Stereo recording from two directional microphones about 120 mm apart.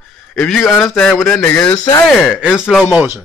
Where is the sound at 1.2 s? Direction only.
20° left (ahead or behind).